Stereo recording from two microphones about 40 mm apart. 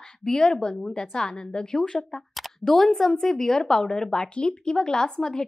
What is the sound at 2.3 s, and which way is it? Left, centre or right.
A woman's voice, centre.